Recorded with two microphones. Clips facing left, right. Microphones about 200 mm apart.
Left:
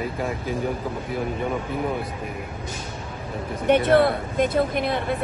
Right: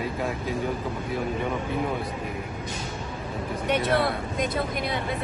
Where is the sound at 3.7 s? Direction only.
55° left (ahead or behind).